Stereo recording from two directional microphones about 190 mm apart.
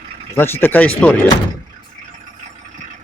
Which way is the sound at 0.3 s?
10° left (ahead or behind).